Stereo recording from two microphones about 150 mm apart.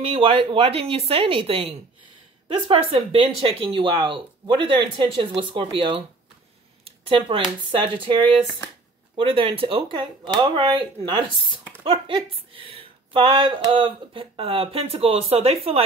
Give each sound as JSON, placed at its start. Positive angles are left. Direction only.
{"t": 0.0, "sound": "speech", "side_deg": -35}